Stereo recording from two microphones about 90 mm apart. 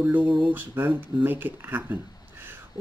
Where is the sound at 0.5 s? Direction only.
20° right (ahead or behind).